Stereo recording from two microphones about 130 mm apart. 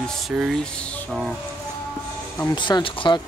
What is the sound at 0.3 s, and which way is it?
Speech, 10° right (ahead or behind).